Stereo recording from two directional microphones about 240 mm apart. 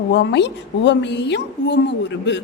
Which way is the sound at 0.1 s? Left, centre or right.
Left.